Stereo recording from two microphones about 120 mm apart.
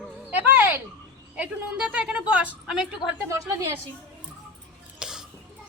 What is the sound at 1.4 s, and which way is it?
A woman's voice, 10° right (ahead or behind).